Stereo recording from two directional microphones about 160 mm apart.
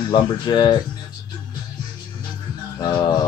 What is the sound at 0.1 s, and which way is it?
Speech, 25° left (ahead or behind).